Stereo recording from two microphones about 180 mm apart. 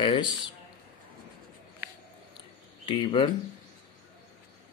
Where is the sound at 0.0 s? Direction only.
30° left (ahead or behind).